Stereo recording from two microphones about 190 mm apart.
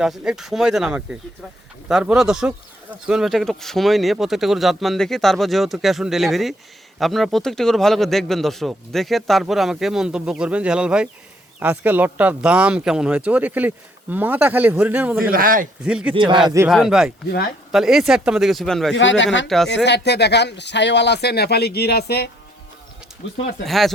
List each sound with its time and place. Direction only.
0.0 s speech: 5° right (ahead or behind)
15.2 s speech: 50° right (ahead or behind)
15.8 s speech: 5° right (ahead or behind)
16.1 s speech: 25° right (ahead or behind)
16.6 s speech: 5° right (ahead or behind)
18.9 s speech: 75° left (ahead or behind); by 22.3 s 60° left (ahead or behind)
23.6 s speech: centre (ahead or behind)